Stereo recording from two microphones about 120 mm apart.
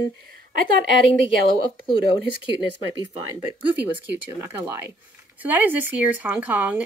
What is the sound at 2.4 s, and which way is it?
Speech, 40° left (ahead or behind).